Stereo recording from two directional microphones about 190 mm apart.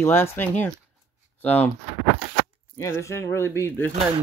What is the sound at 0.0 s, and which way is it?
Speech, 10° left (ahead or behind).